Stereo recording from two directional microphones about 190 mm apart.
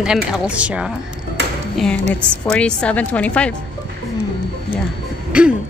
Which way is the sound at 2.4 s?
5° left (ahead or behind).